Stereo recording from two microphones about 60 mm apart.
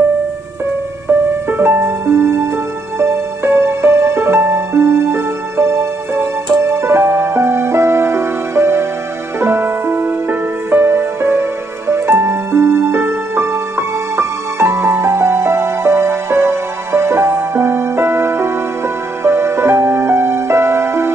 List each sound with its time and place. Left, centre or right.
1.6 s music: right